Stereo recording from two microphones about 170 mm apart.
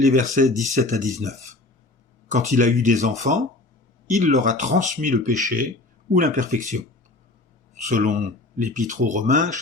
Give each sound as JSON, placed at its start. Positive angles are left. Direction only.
{"t": 0.0, "sound": "speech", "side_deg": -50}
{"t": 7.9, "sound": "speech", "side_deg": -45}